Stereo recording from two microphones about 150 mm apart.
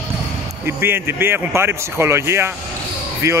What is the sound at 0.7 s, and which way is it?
A man's voice, 15° right (ahead or behind).